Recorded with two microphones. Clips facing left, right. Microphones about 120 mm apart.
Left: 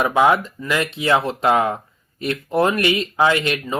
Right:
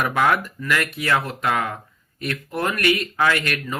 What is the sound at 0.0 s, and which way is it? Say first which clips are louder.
Speech: left 4 dB; 20° left (ahead or behind).